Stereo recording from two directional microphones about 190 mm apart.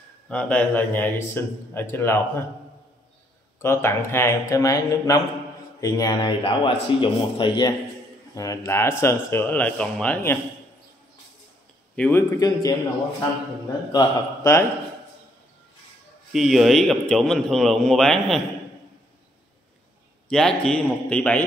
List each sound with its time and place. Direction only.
0.3 s speech: 5° left (ahead or behind)
3.6 s a man's voice: 15° left (ahead or behind)
11.9 s speech: 10° left (ahead or behind)
13.9 s speech: 15° left (ahead or behind)
16.3 s a man's voice: centre (ahead or behind)
20.2 s a man's voice: 5° left (ahead or behind)